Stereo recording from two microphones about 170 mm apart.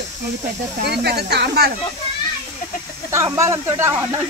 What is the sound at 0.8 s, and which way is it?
Speech, 75° right (ahead or behind).